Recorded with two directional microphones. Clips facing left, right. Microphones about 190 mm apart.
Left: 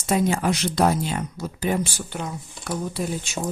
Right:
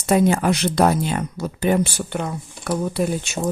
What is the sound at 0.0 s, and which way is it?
Speech, 60° right (ahead or behind).